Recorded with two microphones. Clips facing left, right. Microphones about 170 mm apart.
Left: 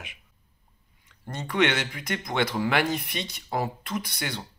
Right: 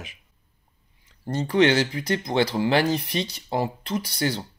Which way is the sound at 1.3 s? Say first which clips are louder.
Right 6 dB; 35° right (ahead or behind).